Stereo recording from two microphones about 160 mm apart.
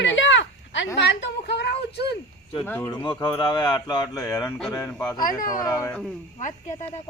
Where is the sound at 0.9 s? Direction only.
90° left.